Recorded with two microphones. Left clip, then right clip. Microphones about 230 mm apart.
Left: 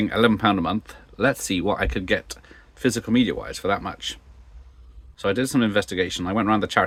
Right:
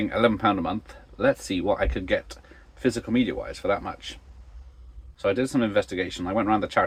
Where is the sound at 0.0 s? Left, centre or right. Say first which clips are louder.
Left 2 dB; left.